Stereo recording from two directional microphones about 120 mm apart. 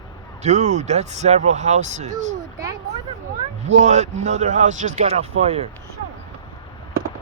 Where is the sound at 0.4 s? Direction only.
70° right (ahead or behind).